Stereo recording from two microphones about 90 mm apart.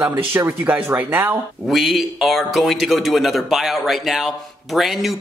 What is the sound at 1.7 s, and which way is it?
Speech, centre (ahead or behind).